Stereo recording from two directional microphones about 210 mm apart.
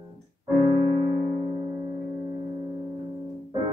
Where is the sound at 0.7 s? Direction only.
15° right (ahead or behind).